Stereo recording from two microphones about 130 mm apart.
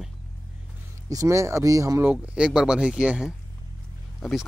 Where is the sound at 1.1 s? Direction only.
25° right (ahead or behind).